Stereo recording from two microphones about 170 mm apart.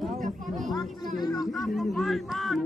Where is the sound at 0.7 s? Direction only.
25° left (ahead or behind).